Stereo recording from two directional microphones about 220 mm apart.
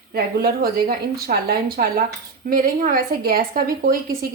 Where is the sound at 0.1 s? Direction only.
45° right (ahead or behind).